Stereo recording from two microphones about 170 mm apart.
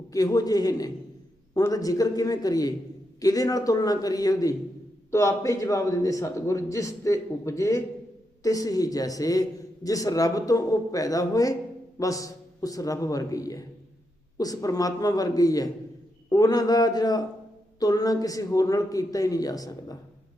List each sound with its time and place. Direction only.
0.1 s a man's voice: 20° left (ahead or behind)